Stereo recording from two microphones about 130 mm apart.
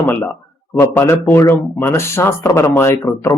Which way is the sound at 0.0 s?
15° left (ahead or behind).